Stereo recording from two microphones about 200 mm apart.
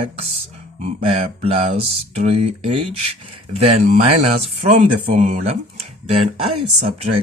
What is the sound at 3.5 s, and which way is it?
Speech, 30° right (ahead or behind).